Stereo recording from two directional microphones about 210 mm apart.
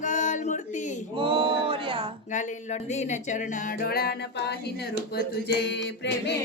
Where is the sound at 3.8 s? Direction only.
45° left (ahead or behind).